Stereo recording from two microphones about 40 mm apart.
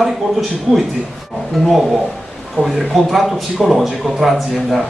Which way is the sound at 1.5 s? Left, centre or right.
Centre.